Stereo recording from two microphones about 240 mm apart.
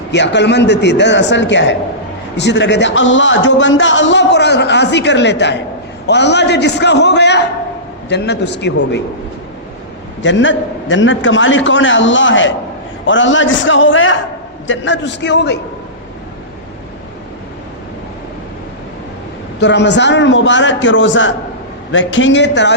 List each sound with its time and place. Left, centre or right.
0.1 s a man's voice: left
10.2 s a man's voice: left
19.5 s a man's voice: left